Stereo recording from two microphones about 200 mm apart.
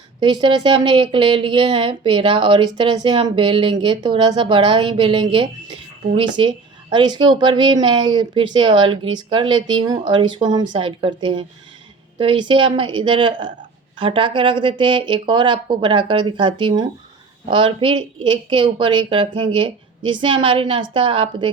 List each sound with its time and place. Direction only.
0.2 s a woman's voice: 25° right (ahead or behind)